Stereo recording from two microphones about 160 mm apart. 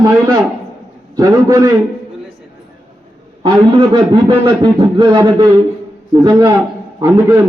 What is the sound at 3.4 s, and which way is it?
A man's voice, 30° right (ahead or behind).